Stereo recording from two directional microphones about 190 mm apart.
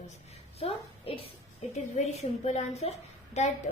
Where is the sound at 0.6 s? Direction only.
30° left (ahead or behind).